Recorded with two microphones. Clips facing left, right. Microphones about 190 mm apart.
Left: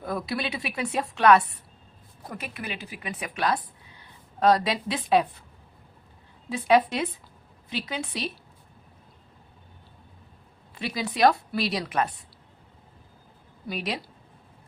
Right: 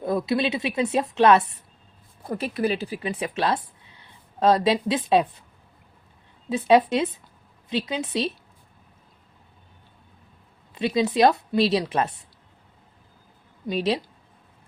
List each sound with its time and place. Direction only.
0.0 s speech: 25° right (ahead or behind)
6.5 s speech: 20° right (ahead or behind)
10.8 s speech: 20° right (ahead or behind)
13.7 s speech: 25° right (ahead or behind)